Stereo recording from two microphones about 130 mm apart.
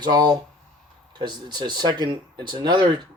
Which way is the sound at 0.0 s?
30° right (ahead or behind).